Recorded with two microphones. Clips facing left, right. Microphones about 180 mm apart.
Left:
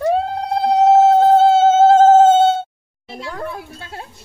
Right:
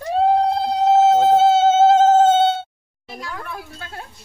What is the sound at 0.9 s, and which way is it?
Mosquito, 50° left (ahead or behind).